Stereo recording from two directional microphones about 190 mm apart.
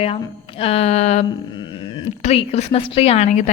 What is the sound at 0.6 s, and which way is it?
Speech, 35° left (ahead or behind).